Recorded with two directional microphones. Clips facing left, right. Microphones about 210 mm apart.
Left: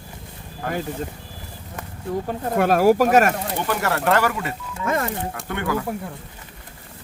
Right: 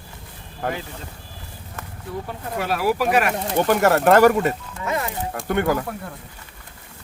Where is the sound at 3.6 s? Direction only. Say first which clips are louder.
Right 6 dB; 45° right (ahead or behind).